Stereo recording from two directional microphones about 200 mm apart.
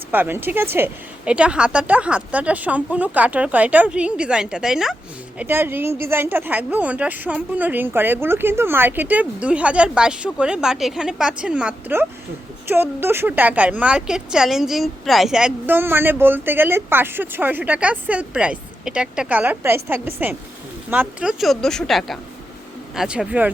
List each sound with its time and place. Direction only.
0.1 s a woman's voice: 10° right (ahead or behind)